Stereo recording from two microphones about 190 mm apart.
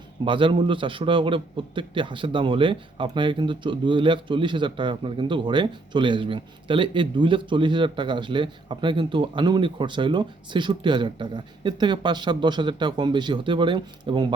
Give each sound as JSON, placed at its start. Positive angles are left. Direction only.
{"t": 0.3, "sound": "a man's voice", "side_deg": -25}